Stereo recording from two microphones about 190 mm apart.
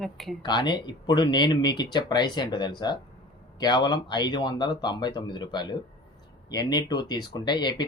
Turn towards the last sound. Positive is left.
turn(degrees=25)  # may be behind; listen again after turning